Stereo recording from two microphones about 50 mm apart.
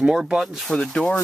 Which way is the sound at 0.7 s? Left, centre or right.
Centre.